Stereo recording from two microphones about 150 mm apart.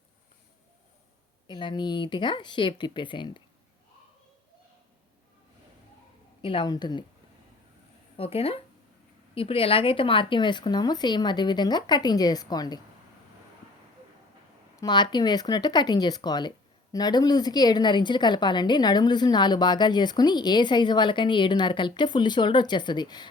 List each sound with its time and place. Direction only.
1.5 s speech: 30° left (ahead or behind)
6.4 s speech: 35° left (ahead or behind)
8.1 s a woman's voice: 40° left (ahead or behind)
14.8 s a woman's voice: 30° left (ahead or behind)